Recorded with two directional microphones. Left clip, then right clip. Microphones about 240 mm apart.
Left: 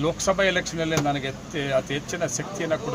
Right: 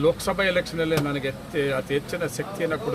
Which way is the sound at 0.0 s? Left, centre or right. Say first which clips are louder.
Even; centre.